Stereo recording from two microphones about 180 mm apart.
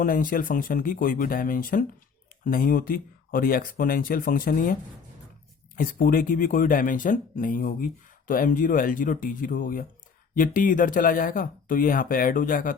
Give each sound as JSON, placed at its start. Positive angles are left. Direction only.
{"t": 0.0, "sound": "speech", "side_deg": 50}